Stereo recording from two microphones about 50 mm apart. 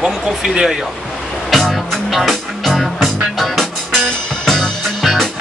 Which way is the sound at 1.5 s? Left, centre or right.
Centre.